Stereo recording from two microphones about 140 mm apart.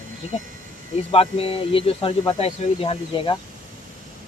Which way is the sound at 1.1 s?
45° left (ahead or behind).